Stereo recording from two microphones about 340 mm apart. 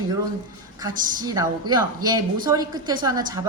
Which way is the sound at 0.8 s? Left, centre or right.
Centre.